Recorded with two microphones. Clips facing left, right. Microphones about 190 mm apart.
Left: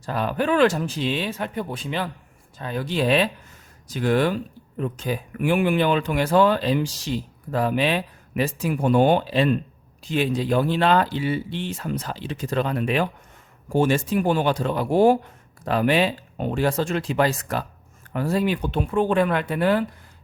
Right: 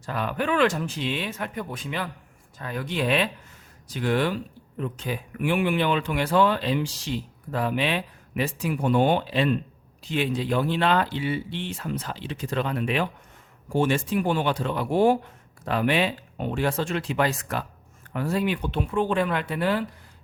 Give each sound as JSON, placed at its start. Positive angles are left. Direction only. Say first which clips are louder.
{"t": 0.0, "sound": "speech", "louder": "left 4 dB", "side_deg": 35}